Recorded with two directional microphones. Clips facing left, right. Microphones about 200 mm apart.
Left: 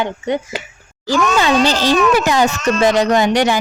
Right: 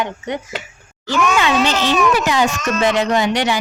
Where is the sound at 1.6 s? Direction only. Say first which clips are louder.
Left 2 dB; 35° left (ahead or behind).